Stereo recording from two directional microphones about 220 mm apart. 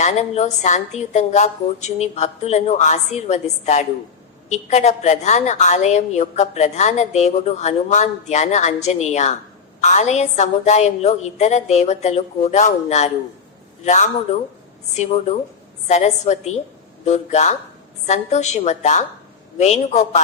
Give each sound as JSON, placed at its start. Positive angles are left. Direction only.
{"t": 0.0, "sound": "a woman's voice", "side_deg": 30}